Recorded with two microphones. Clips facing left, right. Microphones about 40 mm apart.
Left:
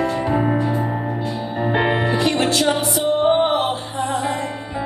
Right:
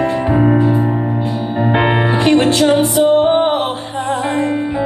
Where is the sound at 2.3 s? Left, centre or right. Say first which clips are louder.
Right 10 dB; right.